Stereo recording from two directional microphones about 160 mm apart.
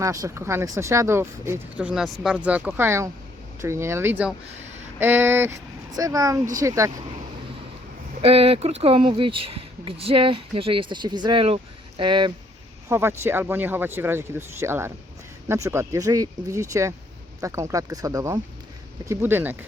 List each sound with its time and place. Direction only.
0.0 s speech: 20° right (ahead or behind)
8.2 s speech: 35° right (ahead or behind)
12.9 s speech: 15° right (ahead or behind)